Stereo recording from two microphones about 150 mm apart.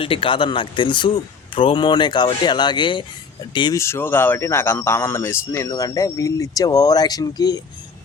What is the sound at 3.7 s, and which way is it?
Speech, 15° left (ahead or behind).